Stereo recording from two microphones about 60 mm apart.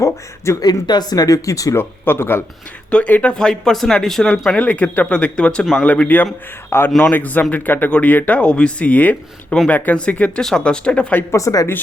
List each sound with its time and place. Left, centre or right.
0.0 s speech: left
1.1 s speech: left
1.7 s speech: left
2.9 s speech: left
3.3 s speech: centre
4.5 s speech: left
5.8 s speech: left
6.7 s speech: left
7.0 s speech: left
11.3 s speech: left